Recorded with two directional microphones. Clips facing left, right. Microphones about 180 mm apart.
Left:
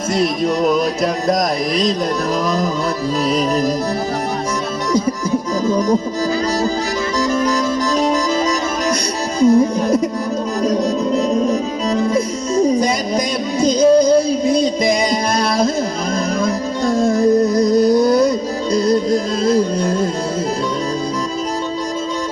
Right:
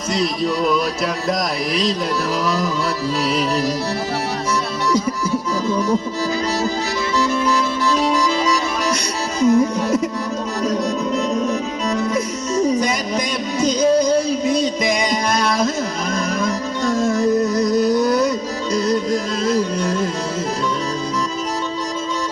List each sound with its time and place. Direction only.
0.2 s music: 45° left (ahead or behind)
3.2 s music: 40° left (ahead or behind)
5.6 s music: 40° left (ahead or behind)
7.5 s music: 40° left (ahead or behind)